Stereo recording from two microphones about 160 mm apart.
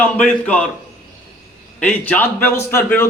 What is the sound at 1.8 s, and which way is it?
A man's voice, 10° left (ahead or behind).